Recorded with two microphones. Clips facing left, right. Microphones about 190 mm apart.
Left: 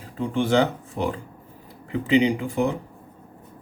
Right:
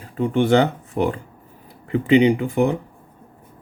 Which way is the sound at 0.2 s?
60° right (ahead or behind).